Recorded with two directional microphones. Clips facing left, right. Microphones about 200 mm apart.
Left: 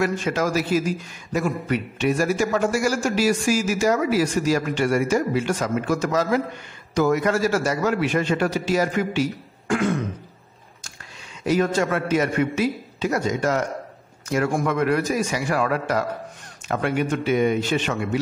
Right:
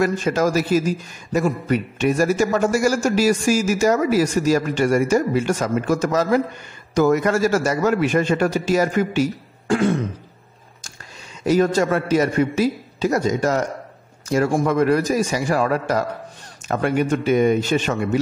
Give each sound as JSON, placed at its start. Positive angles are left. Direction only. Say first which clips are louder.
{"t": 0.0, "sound": "a man's voice", "louder": "right 4 dB", "side_deg": -40}
{"t": 9.7, "sound": "throat clearing", "louder": "right 3 dB", "side_deg": -30}
{"t": 11.4, "sound": "a man's voice", "louder": "right 4 dB", "side_deg": -40}